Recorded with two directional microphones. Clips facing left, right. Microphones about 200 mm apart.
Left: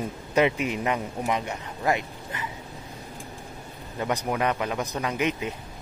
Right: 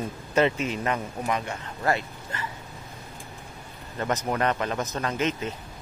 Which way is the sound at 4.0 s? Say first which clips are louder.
Even; 10° left (ahead or behind).